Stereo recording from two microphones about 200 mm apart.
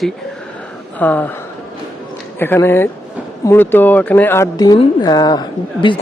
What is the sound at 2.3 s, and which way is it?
Speech, 10° left (ahead or behind).